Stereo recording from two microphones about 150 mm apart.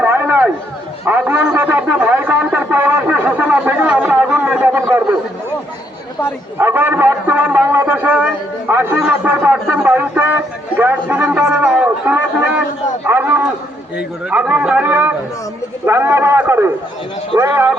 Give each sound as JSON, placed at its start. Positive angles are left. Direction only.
{"t": 0.0, "sound": "a sound", "side_deg": -10}
{"t": 1.0, "sound": "a man's voice", "side_deg": -10}
{"t": 6.6, "sound": "speech", "side_deg": -15}